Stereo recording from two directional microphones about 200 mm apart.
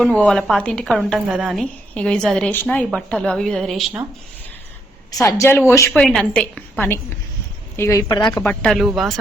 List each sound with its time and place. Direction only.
0.0 s a woman's voice: 5° left (ahead or behind)
5.2 s speech: 15° left (ahead or behind)
6.0 s a woman's voice: centre (ahead or behind)
8.6 s a woman's voice: centre (ahead or behind)